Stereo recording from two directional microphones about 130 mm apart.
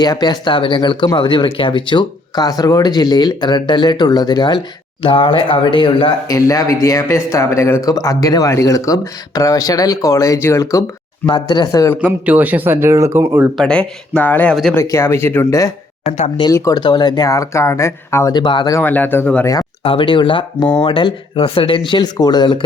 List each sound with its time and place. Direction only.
0.0 s speech: 30° left (ahead or behind)
6.2 s speech: 25° left (ahead or behind)
11.9 s speech: 10° right (ahead or behind)
13.6 s speech: 5° left (ahead or behind); by 15.7 s 25° left (ahead or behind)
16.0 s speech: 65° left (ahead or behind)
16.5 s speech: 25° left (ahead or behind)
18.3 s speech: 35° left (ahead or behind)
18.7 s speech: 15° left (ahead or behind)
19.8 s speech: 40° left (ahead or behind)